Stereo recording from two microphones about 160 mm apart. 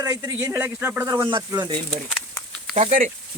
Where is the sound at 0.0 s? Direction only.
20° right (ahead or behind).